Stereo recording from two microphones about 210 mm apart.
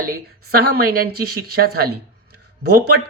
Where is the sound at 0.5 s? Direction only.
45° right (ahead or behind).